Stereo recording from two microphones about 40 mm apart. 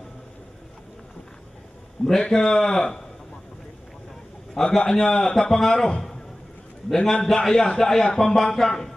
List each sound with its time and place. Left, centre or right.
2.0 s speech: centre
4.6 s speech: centre
6.9 s speech: centre